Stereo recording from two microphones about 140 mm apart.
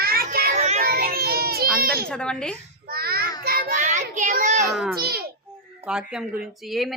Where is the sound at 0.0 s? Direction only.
90° right.